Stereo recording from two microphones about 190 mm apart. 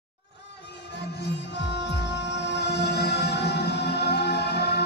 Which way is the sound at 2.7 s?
60° left (ahead or behind).